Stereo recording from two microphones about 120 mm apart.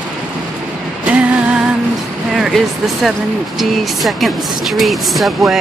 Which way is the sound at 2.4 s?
Centre (ahead or behind).